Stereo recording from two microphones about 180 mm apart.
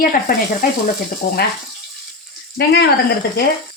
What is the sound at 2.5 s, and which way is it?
Speech, 65° left (ahead or behind).